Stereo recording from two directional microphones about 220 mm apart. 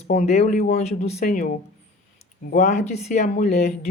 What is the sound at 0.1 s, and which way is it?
Speech, 30° left (ahead or behind).